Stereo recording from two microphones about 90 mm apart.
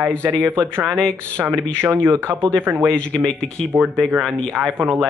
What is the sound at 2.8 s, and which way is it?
Speech, 5° left (ahead or behind).